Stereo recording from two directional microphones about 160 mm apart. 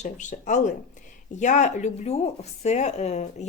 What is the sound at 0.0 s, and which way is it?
A woman's voice, 50° left (ahead or behind).